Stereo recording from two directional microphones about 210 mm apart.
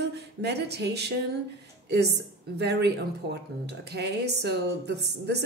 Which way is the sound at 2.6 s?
50° right (ahead or behind).